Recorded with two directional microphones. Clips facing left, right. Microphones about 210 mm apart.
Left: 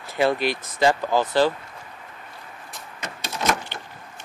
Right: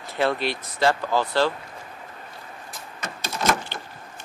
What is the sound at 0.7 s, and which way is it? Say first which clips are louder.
Speech: left 2 dB; 20° left (ahead or behind).